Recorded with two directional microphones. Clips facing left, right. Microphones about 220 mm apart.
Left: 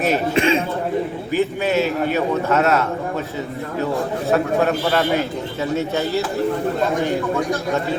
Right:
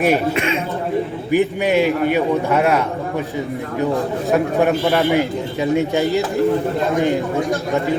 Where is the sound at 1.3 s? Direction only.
15° right (ahead or behind).